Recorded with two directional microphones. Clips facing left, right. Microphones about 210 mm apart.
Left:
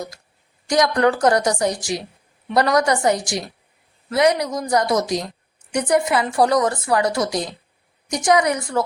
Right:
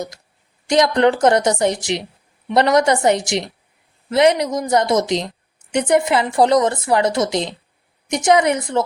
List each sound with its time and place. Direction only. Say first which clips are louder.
0.7 s a woman's voice: right 3 dB; 25° right (ahead or behind)